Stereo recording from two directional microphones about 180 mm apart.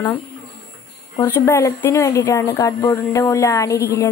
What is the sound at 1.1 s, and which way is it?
Speech, 15° left (ahead or behind).